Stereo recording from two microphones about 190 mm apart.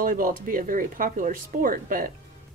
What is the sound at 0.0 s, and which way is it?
Speech, 45° right (ahead or behind).